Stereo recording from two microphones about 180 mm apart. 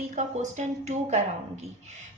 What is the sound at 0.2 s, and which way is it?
A woman's voice, 40° right (ahead or behind).